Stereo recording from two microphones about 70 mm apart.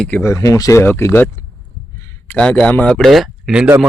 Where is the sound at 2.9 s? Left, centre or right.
Centre.